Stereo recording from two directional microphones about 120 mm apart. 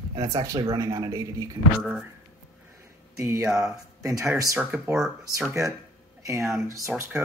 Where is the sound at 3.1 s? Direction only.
25° right (ahead or behind).